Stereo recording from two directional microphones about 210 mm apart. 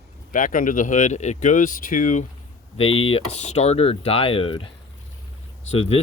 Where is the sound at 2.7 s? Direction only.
25° left (ahead or behind).